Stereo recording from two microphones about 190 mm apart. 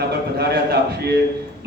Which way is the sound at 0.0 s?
60° right (ahead or behind).